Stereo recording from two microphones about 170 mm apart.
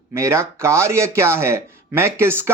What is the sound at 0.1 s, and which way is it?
Speech, 15° right (ahead or behind).